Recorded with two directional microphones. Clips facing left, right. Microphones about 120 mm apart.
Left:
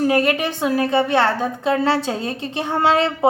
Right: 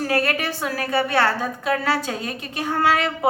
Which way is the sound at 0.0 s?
20° left (ahead or behind).